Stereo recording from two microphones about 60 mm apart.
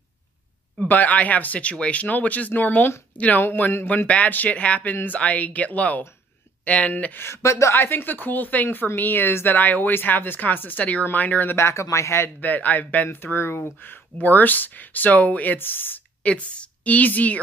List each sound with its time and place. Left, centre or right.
0.8 s speech: left
7.2 s speech: left
7.7 s speech: left
11.5 s speech: left
12.4 s speech: left
16.3 s a woman's voice: left